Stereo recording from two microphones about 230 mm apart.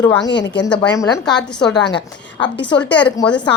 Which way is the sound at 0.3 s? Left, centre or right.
Left.